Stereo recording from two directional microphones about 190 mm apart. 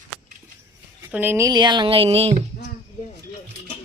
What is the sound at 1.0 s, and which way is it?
Speech, 10° right (ahead or behind).